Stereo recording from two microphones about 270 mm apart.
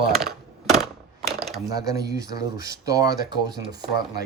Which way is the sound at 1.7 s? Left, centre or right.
Centre.